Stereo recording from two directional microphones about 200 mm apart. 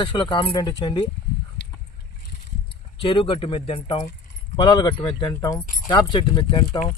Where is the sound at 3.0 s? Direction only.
25° left (ahead or behind).